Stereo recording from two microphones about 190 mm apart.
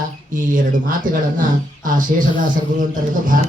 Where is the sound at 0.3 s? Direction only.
45° right (ahead or behind).